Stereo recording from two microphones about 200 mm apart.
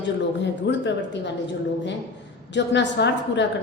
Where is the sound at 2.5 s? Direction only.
60° left (ahead or behind).